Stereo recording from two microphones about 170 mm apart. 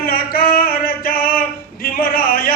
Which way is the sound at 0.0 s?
60° left (ahead or behind).